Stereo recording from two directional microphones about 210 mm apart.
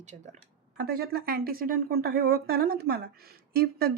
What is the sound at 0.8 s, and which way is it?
Speech, 45° right (ahead or behind).